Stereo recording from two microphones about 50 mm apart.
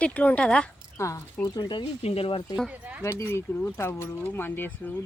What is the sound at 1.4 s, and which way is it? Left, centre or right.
Speech, left.